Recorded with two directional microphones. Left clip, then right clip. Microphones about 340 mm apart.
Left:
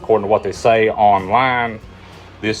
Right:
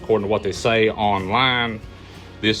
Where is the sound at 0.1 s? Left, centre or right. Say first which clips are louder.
Left 5 dB; centre.